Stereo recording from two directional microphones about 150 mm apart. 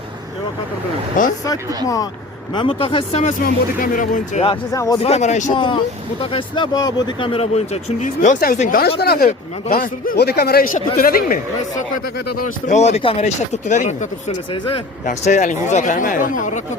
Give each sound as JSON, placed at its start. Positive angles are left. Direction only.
{"t": 1.2, "sound": "speech", "side_deg": 60}
{"t": 2.6, "sound": "speech", "side_deg": 35}
{"t": 3.4, "sound": "speech", "side_deg": 65}
{"t": 4.4, "sound": "speech", "side_deg": 25}
{"t": 5.0, "sound": "speech", "side_deg": 50}
{"t": 5.5, "sound": "speech", "side_deg": 35}
{"t": 9.0, "sound": "speech", "side_deg": 90}
{"t": 12.4, "sound": "speech", "side_deg": 55}